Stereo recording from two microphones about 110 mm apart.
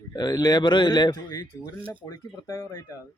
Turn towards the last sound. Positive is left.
turn(degrees=25)  # may be behind; listen again after turning